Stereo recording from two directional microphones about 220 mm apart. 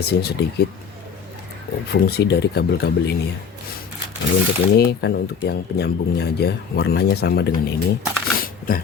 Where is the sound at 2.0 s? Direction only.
50° left (ahead or behind).